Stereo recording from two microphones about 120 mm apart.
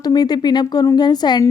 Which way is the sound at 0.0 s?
35° left (ahead or behind).